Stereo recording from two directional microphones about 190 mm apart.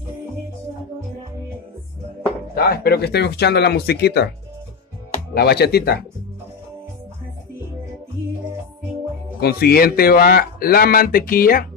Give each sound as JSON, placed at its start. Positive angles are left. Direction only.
{"t": 2.5, "sound": "speech", "side_deg": 50}
{"t": 5.3, "sound": "speech", "side_deg": 55}
{"t": 9.4, "sound": "speech", "side_deg": 55}